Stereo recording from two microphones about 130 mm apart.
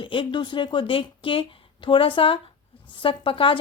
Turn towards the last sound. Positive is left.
turn(degrees=45)  # may be behind; listen again after turning